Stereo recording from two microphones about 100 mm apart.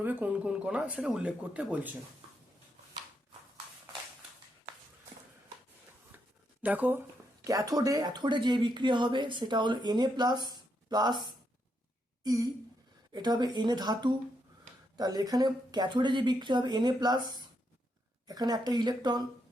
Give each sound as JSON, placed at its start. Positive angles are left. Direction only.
{"t": 0.0, "sound": "speech", "side_deg": -15}
{"t": 6.6, "sound": "speech", "side_deg": -15}
{"t": 7.4, "sound": "speech", "side_deg": -35}
{"t": 12.2, "sound": "a sound", "side_deg": -40}
{"t": 13.1, "sound": "speech", "side_deg": -45}